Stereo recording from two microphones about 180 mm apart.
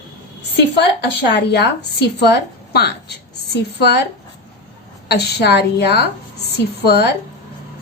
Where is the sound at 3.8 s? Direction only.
65° left (ahead or behind).